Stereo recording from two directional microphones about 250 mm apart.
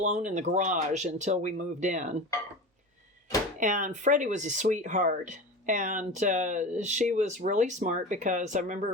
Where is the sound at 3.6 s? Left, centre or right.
Right.